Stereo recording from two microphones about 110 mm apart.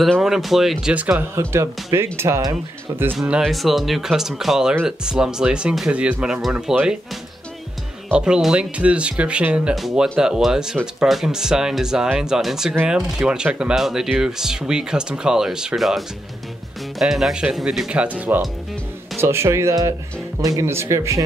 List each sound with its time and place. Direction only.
0.0 s speech: centre (ahead or behind)
1.3 s speech: 25° right (ahead or behind)
3.2 s speech: 5° right (ahead or behind)
8.1 s speech: 5° right (ahead or behind)
9.8 s speech: centre (ahead or behind)
17.0 s speech: centre (ahead or behind); by 21.2 s 25° right (ahead or behind)